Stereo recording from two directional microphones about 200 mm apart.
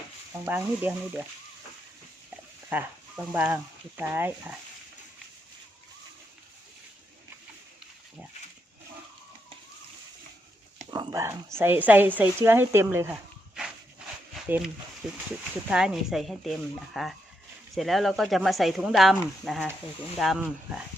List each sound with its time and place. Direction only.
0.4 s a woman's voice: 10° right (ahead or behind)
2.6 s speech: 10° right (ahead or behind)
10.9 s a sound: 20° right (ahead or behind)
11.5 s a woman's voice: 10° right (ahead or behind)
14.4 s speech: 5° right (ahead or behind)